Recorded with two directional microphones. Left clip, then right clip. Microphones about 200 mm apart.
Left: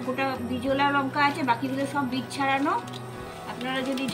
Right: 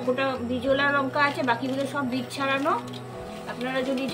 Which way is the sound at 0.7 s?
35° right (ahead or behind).